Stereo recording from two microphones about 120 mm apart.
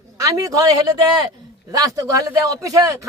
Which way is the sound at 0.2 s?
25° right (ahead or behind).